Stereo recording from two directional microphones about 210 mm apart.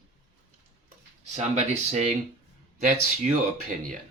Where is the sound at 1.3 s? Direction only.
30° right (ahead or behind).